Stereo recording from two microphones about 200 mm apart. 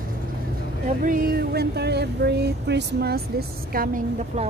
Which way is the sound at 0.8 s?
45° right (ahead or behind).